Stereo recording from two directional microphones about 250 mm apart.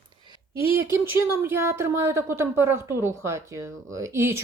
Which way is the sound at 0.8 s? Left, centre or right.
Centre.